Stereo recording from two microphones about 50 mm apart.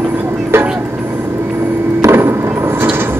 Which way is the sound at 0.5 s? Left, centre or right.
Right.